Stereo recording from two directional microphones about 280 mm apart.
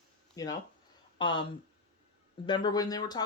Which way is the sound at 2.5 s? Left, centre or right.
Centre.